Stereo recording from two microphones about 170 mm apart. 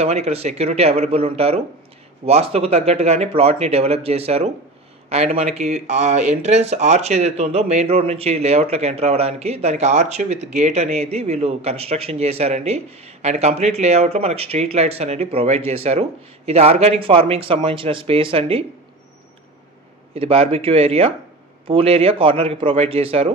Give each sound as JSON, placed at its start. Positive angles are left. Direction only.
{"t": 0.0, "sound": "speech", "side_deg": -40}
{"t": 20.2, "sound": "speech", "side_deg": -35}